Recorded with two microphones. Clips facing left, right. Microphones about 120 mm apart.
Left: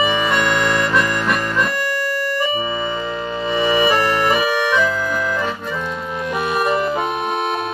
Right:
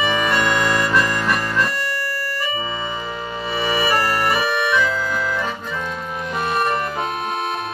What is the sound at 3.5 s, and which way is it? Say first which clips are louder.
Music: left 4 dB; 20° left (ahead or behind).